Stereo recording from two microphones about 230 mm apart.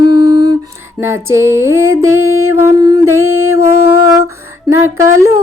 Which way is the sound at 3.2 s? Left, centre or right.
Right.